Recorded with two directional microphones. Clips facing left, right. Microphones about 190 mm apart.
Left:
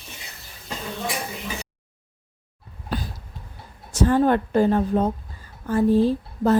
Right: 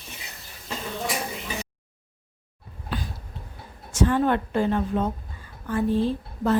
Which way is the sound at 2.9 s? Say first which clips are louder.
Left 3 dB; 40° left (ahead or behind).